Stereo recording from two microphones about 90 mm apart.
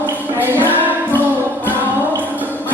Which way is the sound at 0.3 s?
20° right (ahead or behind).